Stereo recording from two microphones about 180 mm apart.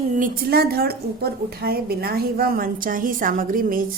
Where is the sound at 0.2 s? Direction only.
60° right (ahead or behind).